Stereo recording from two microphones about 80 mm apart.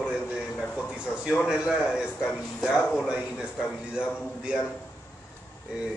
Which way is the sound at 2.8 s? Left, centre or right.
Centre.